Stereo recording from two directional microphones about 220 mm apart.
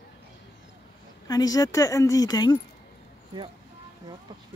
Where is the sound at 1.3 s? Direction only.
15° left (ahead or behind).